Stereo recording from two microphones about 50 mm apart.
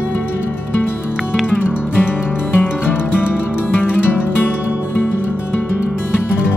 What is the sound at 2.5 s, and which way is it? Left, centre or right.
Music, left.